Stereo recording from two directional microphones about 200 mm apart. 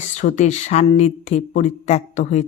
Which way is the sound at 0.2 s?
35° left (ahead or behind).